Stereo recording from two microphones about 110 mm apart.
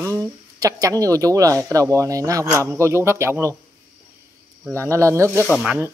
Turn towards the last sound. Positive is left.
turn(degrees=-10)  # may be behind; listen again after turning